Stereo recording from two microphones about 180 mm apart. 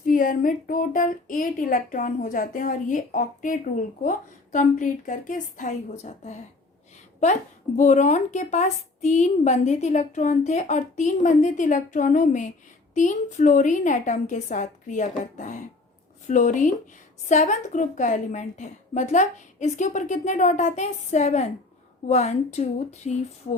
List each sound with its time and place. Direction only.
0.0 s a woman's voice: 50° left (ahead or behind)
7.8 s a woman's voice: 40° left (ahead or behind)